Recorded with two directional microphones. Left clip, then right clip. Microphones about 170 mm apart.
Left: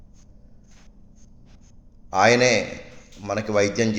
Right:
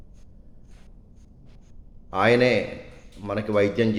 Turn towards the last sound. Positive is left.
turn(degrees=-15)  # may be behind; listen again after turning